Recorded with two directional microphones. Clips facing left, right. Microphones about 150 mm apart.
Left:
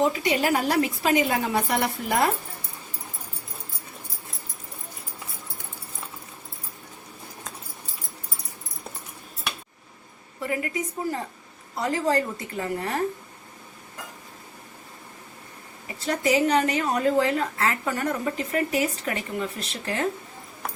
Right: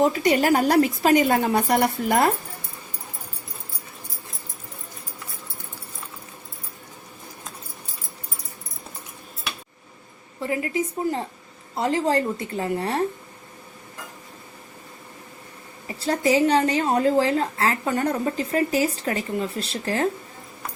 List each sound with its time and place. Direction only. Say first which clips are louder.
0.0 s a woman's voice: right 4 dB; 40° right (ahead or behind)
10.4 s a woman's voice: right 3 dB; 30° right (ahead or behind)
16.0 s a woman's voice: right 3 dB; 35° right (ahead or behind)